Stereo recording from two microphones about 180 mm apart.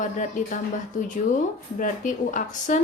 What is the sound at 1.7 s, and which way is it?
Speech, 45° left (ahead or behind).